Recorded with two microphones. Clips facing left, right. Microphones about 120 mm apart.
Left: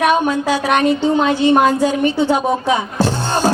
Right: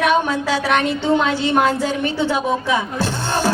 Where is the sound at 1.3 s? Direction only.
15° left (ahead or behind).